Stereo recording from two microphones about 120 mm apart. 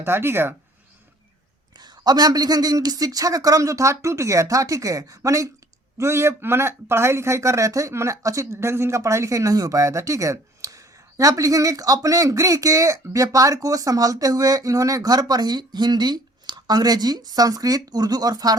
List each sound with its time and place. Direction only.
0.0 s speech: 20° right (ahead or behind)
1.7 s speech: 35° right (ahead or behind)